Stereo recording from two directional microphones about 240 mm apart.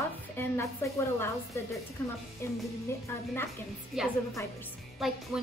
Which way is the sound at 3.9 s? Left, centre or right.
Centre.